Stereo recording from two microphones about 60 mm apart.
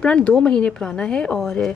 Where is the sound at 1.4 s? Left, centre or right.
Centre.